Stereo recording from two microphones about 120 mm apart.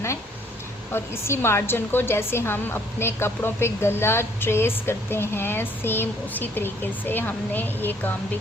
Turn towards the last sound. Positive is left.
turn(degrees=15)  # may be behind; listen again after turning